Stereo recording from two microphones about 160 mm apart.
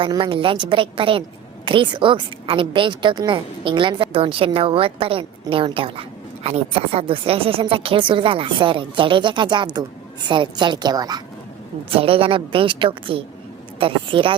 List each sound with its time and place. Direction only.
0.0 s a woman's voice: 30° right (ahead or behind)